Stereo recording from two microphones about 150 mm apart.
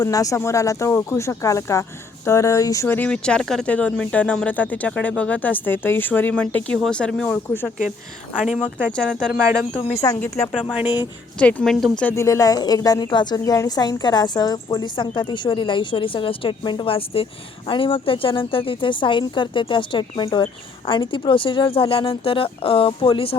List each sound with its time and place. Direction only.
0.0 s a woman's voice: 25° left (ahead or behind); by 7.3 s 5° left (ahead or behind)
8.4 s speech: centre (ahead or behind)
9.3 s speech: 15° right (ahead or behind)
10.2 s a woman's voice: 20° left (ahead or behind)
11.3 s speech: 10° left (ahead or behind)
12.1 s a woman's voice: 20° left (ahead or behind); by 23.4 s 40° left (ahead or behind)